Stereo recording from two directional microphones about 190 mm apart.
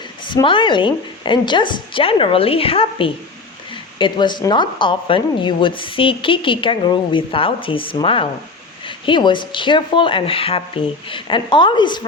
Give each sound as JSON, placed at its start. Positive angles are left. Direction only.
{"t": 0.3, "sound": "a woman's voice", "side_deg": 25}